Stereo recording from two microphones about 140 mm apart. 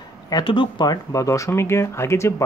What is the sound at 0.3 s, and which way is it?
Speech, 35° left (ahead or behind).